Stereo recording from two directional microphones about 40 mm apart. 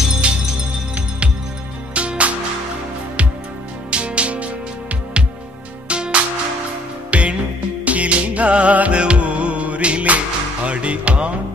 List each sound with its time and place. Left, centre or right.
0.2 s music: right
2.0 s music: right
3.9 s music: right
5.9 s music: right